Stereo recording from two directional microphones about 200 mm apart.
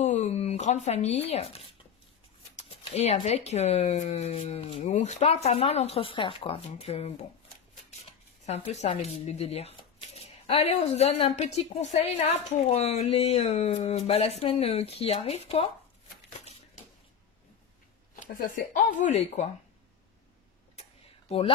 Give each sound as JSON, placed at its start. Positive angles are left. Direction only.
{"t": 0.0, "sound": "speech", "side_deg": 35}
{"t": 2.5, "sound": "a sound", "side_deg": 30}
{"t": 3.3, "sound": "speech", "side_deg": 35}
{"t": 18.2, "sound": "speech", "side_deg": 45}
{"t": 20.8, "sound": "tick-tock", "side_deg": 35}
{"t": 21.3, "sound": "speech", "side_deg": 30}